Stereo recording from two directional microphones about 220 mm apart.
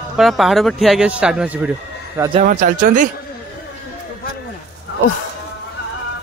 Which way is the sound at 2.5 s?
40° right (ahead or behind).